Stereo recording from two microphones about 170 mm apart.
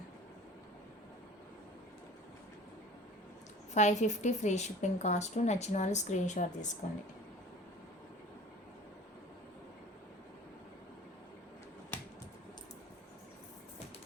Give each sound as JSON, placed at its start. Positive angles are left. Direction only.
{"t": 3.8, "sound": "a woman's voice", "side_deg": 45}